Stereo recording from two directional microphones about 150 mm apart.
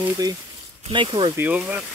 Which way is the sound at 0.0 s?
25° right (ahead or behind).